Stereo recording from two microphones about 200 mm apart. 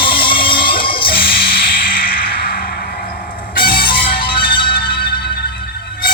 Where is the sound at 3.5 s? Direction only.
45° left (ahead or behind).